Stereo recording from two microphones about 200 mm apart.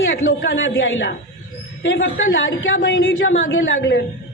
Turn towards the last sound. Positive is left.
turn(degrees=70)  # may be behind; listen again after turning